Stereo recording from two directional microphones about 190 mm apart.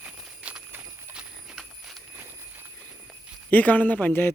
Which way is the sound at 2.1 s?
10° right (ahead or behind).